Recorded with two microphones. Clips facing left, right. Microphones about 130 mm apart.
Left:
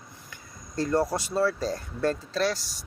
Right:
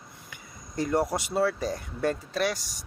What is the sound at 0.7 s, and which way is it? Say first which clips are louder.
Speech: left 1 dB; 20° right (ahead or behind).